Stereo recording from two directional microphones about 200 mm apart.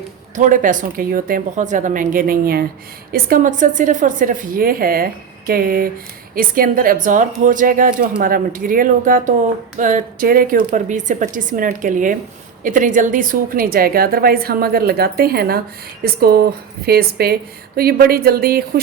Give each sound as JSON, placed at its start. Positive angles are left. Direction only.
{"t": 0.3, "sound": "a woman's voice", "side_deg": -40}